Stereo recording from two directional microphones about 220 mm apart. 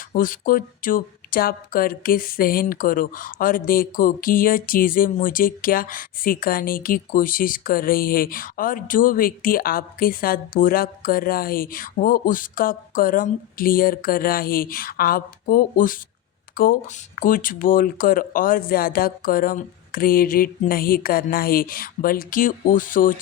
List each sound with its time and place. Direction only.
0.1 s speech: 40° left (ahead or behind)